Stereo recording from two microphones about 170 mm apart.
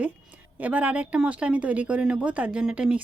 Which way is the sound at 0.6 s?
10° right (ahead or behind).